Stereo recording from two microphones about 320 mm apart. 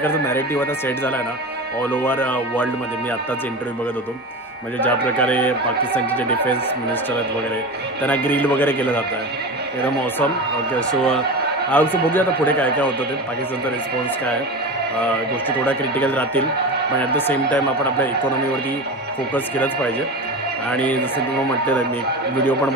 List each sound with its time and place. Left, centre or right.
0.0 s a man's voice: centre
4.7 s a man's voice: centre
8.0 s a man's voice: centre
10.9 s a man's voice: centre
15.4 s a man's voice: centre
19.3 s a man's voice: centre